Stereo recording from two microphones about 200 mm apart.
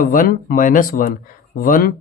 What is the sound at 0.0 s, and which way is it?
Speech, 45° left (ahead or behind).